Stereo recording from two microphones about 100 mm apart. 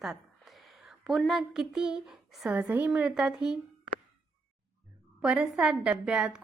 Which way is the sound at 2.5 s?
15° right (ahead or behind).